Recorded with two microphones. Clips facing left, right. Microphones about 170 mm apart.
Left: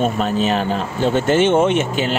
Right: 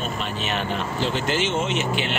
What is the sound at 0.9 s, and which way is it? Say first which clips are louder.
Speech: left 10 dB; 50° left (ahead or behind).